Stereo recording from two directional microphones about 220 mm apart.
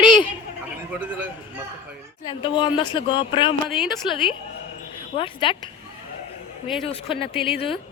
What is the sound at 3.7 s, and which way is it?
Speech, centre (ahead or behind).